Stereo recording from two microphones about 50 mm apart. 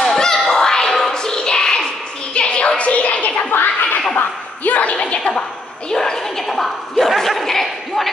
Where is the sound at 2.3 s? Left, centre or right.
Left.